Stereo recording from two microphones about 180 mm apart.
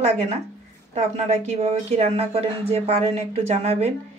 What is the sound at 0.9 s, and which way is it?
A woman's voice, 35° right (ahead or behind).